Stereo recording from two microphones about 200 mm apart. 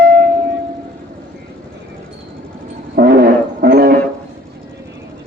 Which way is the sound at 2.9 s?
50° right (ahead or behind).